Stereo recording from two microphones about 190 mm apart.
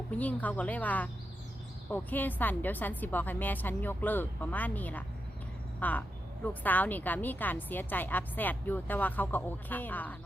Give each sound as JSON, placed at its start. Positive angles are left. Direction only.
{"t": 0.1, "sound": "a woman's voice", "side_deg": 10}